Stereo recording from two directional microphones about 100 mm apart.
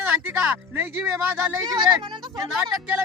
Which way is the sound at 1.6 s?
45° right (ahead or behind).